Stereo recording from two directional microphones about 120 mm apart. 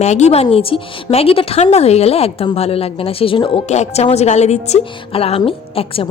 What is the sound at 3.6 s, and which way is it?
A woman's voice, 65° left (ahead or behind).